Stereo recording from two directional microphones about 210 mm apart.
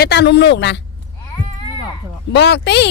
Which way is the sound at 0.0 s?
50° left (ahead or behind).